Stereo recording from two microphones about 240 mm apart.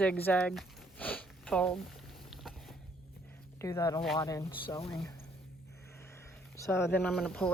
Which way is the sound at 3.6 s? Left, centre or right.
Centre.